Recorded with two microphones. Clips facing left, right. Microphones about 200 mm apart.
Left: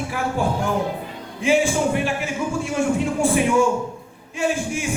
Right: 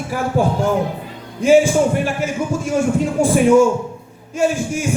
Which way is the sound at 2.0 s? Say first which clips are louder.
Right 3 dB; 40° right (ahead or behind).